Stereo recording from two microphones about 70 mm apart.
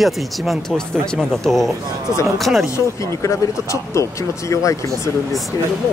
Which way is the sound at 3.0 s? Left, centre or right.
Left.